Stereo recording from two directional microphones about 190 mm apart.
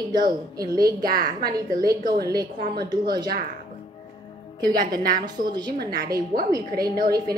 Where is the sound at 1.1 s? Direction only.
50° right (ahead or behind).